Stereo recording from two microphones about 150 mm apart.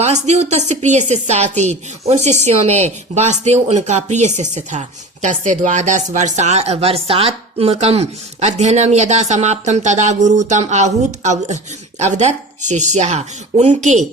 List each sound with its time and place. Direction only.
0.0 s a woman's voice: 50° right (ahead or behind)